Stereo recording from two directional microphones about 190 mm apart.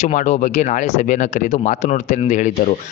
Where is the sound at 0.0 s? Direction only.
40° left (ahead or behind).